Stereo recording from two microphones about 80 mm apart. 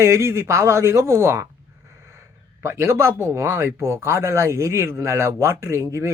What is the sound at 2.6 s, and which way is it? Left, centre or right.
Speech, right.